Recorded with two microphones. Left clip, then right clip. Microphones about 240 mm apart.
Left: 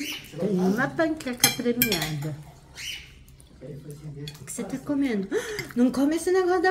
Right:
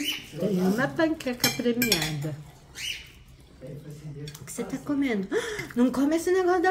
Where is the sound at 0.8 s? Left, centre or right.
Centre.